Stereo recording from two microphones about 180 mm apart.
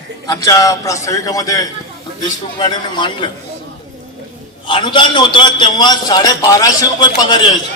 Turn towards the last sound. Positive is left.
turn(degrees=25)  # may be behind; listen again after turning